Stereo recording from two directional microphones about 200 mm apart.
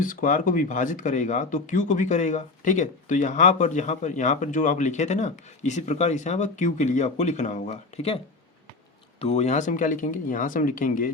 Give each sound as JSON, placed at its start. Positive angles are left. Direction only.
{"t": 0.0, "sound": "speech", "side_deg": 40}
{"t": 9.2, "sound": "speech", "side_deg": 35}